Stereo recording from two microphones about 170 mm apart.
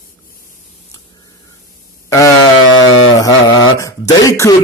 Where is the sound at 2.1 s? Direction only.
20° left (ahead or behind).